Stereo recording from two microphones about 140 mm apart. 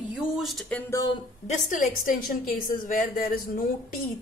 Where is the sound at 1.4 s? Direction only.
65° left (ahead or behind); by 3.4 s 85° left.